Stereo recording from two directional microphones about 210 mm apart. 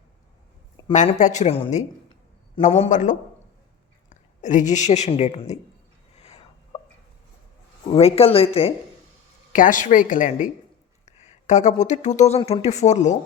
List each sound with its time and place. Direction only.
0.9 s a woman's voice: 35° left (ahead or behind)
6.2 s a sound: 30° left (ahead or behind)
7.9 s speech: 30° left (ahead or behind)
9.5 s a woman's voice: 40° left (ahead or behind)